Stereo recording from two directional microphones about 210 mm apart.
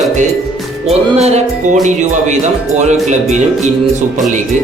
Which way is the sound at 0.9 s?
30° right (ahead or behind).